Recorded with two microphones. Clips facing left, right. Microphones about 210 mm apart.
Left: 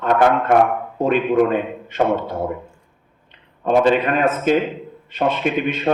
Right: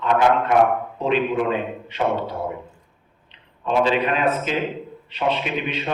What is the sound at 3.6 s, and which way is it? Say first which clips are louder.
A man's voice: left 4 dB; 50° left (ahead or behind).